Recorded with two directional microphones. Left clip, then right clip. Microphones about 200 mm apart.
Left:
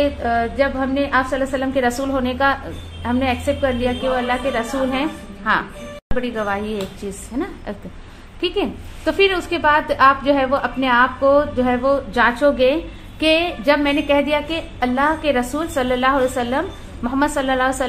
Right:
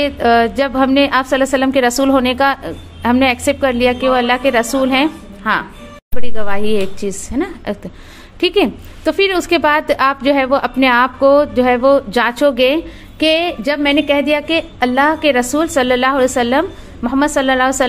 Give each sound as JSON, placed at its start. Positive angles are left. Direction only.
{"t": 0.0, "sound": "a woman's voice", "side_deg": -45}